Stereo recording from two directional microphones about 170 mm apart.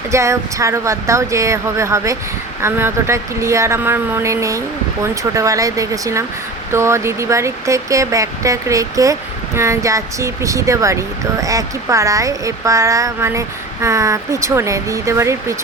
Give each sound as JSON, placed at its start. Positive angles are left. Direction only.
{"t": 0.1, "sound": "speech", "side_deg": -15}